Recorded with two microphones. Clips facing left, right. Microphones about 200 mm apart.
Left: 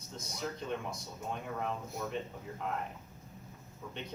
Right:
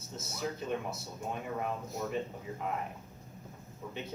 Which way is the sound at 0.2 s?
5° right (ahead or behind).